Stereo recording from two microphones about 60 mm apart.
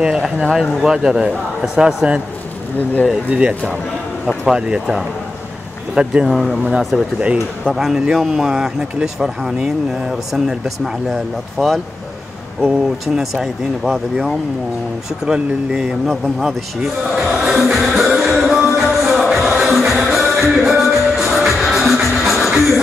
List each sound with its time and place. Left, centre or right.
0.0 s speech: centre
3.3 s speech: centre
6.2 s speech: centre
6.9 s speech: right
7.7 s speech: centre
11.1 s speech: centre
12.6 s speech: centre
15.2 s speech: centre
16.1 s speech: centre
17.3 s music: centre